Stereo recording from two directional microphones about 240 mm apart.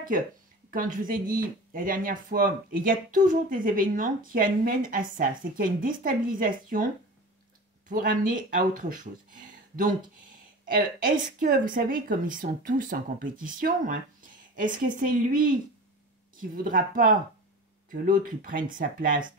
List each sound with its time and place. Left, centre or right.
0.7 s speech: right
7.9 s speech: right